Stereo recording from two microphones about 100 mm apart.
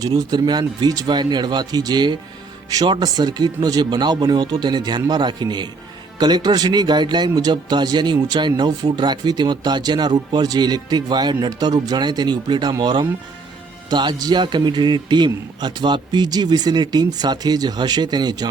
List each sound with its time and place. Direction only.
0.0 s speech: 40° right (ahead or behind)